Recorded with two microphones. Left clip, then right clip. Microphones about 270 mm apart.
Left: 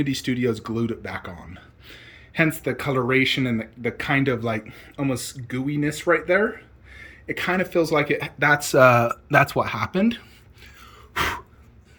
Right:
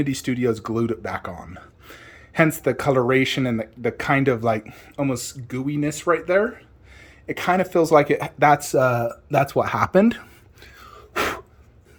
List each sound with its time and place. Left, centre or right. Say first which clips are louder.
0.0 s speech: right 1 dB; centre